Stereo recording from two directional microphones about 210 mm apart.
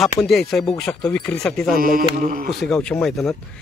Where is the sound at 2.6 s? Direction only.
5° left (ahead or behind).